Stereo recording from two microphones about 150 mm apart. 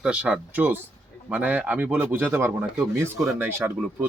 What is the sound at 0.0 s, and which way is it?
Speech, 10° right (ahead or behind).